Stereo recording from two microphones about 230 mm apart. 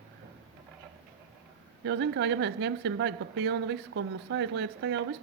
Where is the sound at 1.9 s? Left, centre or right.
Right.